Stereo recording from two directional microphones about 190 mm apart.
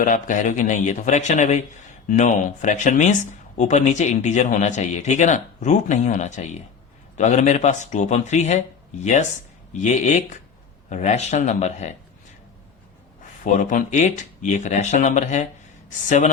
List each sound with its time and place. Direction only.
0.0 s speech: 45° left (ahead or behind)
13.4 s speech: 40° left (ahead or behind)